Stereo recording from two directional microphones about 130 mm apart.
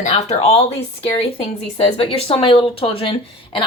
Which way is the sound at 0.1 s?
50° left (ahead or behind).